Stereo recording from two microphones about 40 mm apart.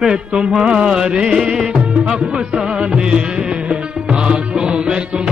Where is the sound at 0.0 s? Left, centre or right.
Centre.